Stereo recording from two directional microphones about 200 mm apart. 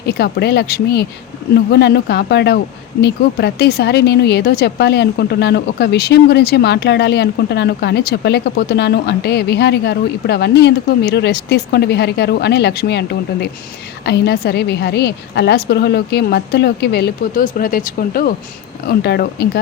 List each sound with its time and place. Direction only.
0.0 s a woman's voice: 55° left (ahead or behind)